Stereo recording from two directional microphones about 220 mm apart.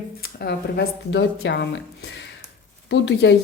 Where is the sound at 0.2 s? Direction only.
45° left (ahead or behind).